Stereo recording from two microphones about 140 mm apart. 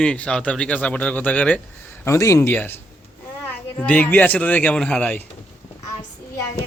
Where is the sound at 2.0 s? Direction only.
20° left (ahead or behind).